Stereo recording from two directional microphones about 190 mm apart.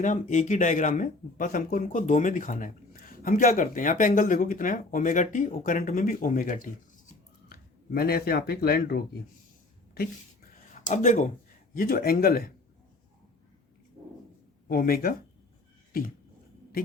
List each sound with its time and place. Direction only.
0.0 s speech: 40° left (ahead or behind)
10.7 s speech: 40° left (ahead or behind)
11.7 s speech: 50° left (ahead or behind)
14.7 s speech: 50° left (ahead or behind)
15.9 s a sound: 50° left (ahead or behind)